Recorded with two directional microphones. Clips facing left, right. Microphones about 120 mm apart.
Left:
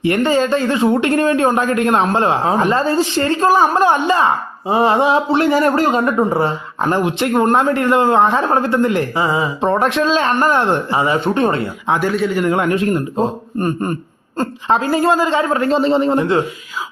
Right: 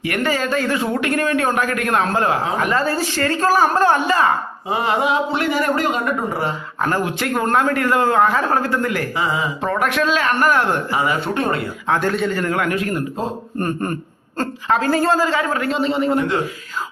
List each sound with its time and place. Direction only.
0.0 s speech: 25° left (ahead or behind)
11.9 s a man's voice: 5° left (ahead or behind)
12.4 s speech: 20° left (ahead or behind)